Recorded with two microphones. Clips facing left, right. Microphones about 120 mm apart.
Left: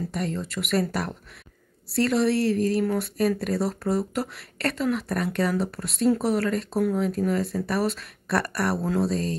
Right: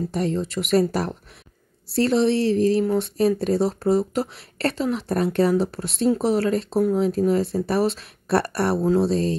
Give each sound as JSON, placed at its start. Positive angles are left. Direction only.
{"t": 0.1, "sound": "speech", "side_deg": -30}